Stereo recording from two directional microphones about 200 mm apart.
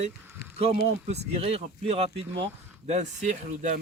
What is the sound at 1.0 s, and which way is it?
Speech, 30° right (ahead or behind).